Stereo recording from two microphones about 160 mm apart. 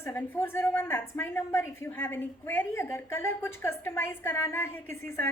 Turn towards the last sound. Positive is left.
turn(degrees=15)  # may be behind; listen again after turning